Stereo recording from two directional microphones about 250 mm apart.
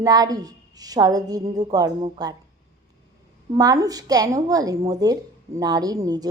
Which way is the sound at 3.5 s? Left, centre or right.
Centre.